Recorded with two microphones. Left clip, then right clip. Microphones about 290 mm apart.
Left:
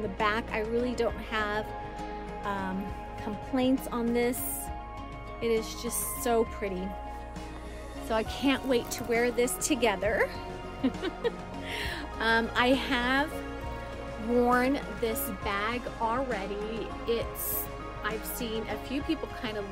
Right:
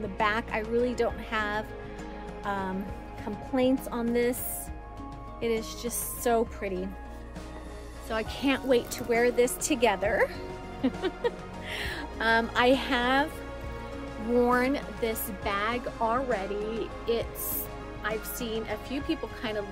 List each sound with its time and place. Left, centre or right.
0.2 s speech: centre
5.4 s speech: centre
8.1 s speech: centre
14.3 s speech: centre